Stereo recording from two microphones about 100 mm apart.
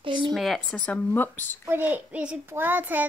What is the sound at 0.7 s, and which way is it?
Speech, 15° left (ahead or behind).